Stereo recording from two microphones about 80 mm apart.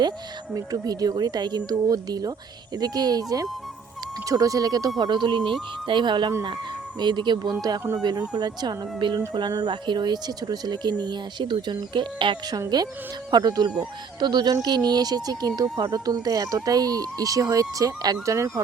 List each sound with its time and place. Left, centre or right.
0.5 s speech: right
4.9 s speech: right
5.8 s speech: right
12.5 s speech: right